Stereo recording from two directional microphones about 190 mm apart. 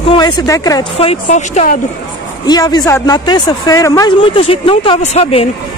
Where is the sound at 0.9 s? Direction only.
35° left (ahead or behind).